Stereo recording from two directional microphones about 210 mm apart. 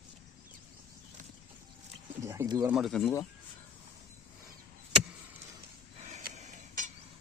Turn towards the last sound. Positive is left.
turn(degrees=-35)  # may be behind; listen again after turning